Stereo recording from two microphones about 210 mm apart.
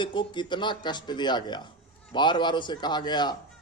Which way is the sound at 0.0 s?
20° left (ahead or behind).